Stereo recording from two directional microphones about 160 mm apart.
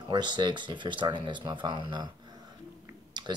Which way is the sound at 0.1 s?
30° right (ahead or behind).